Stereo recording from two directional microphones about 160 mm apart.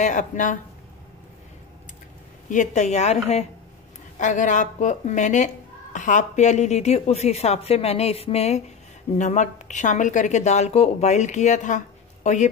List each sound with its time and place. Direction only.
0.0 s a woman's voice: 50° left (ahead or behind)
2.5 s a woman's voice: 50° left (ahead or behind)
4.2 s a woman's voice: 50° left (ahead or behind)